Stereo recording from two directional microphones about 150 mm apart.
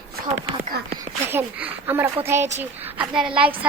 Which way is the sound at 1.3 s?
15° right (ahead or behind).